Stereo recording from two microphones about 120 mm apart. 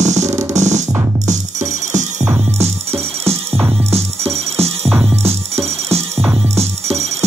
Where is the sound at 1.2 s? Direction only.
90° right.